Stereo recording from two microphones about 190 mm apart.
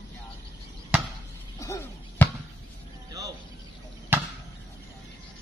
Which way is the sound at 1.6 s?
15° left (ahead or behind).